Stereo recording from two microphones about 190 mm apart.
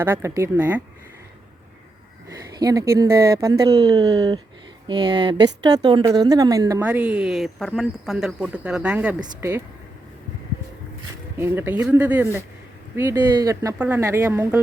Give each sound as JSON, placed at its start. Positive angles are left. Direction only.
{"t": 0.0, "sound": "speech", "side_deg": -15}
{"t": 2.5, "sound": "speech", "side_deg": -20}
{"t": 6.8, "sound": "speech", "side_deg": -5}
{"t": 11.3, "sound": "speech", "side_deg": -10}